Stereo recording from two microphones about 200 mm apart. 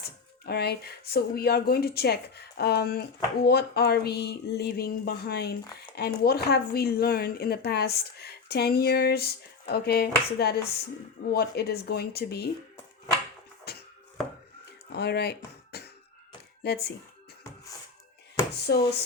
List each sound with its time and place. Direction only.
0.0 s speech: 50° left (ahead or behind)
13.7 s music: 50° left (ahead or behind)
14.9 s speech: 55° left (ahead or behind)
15.7 s cough: 50° left (ahead or behind)
16.6 s speech: 55° left (ahead or behind)
18.5 s a sound: 55° left (ahead or behind)